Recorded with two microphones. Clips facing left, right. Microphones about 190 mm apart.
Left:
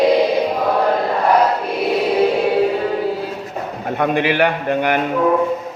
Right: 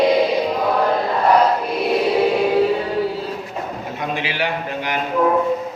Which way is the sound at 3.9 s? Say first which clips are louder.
Left 10 dB; 60° left (ahead or behind).